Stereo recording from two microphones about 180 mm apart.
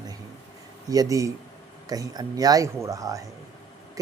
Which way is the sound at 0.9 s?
20° right (ahead or behind).